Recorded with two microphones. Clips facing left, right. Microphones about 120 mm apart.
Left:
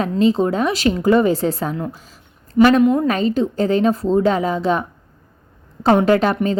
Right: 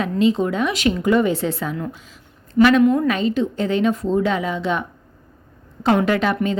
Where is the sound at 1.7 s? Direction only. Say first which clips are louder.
Left 2 dB; 25° left (ahead or behind).